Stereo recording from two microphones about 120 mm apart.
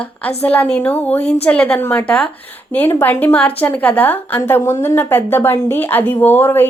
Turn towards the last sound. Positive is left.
turn(degrees=20)  # may be behind; listen again after turning